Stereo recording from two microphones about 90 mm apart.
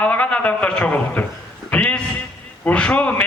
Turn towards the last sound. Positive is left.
turn(degrees=15)  # may be behind; listen again after turning